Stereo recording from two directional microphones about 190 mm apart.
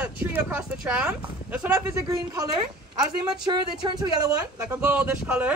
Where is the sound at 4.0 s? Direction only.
15° right (ahead or behind).